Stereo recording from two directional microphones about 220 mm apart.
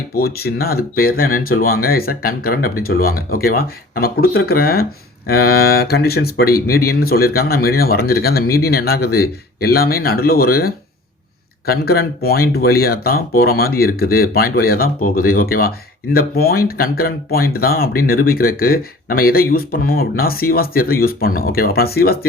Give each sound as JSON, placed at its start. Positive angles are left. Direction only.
{"t": 0.2, "sound": "speech", "side_deg": 45}